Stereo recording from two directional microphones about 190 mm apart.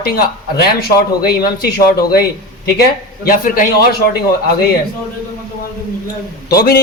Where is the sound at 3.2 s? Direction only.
50° left (ahead or behind).